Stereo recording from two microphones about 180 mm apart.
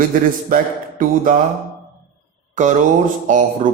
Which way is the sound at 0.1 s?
50° right (ahead or behind).